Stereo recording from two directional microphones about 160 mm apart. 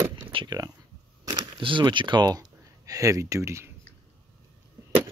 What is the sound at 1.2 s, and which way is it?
Speech, 25° right (ahead or behind).